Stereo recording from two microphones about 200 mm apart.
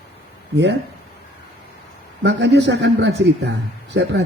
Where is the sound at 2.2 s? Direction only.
60° right (ahead or behind).